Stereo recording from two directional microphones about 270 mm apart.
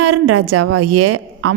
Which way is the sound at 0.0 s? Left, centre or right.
Right.